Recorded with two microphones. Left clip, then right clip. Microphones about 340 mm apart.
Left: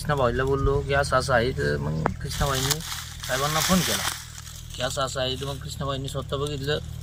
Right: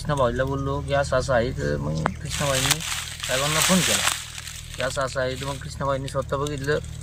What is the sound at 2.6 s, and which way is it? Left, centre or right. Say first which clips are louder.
Speech: right 4 dB; right.